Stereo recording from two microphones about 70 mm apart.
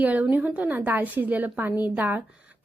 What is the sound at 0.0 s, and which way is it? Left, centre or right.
A woman's voice, right.